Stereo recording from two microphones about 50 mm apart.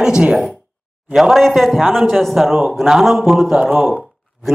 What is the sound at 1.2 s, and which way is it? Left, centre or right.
A man's voice, centre.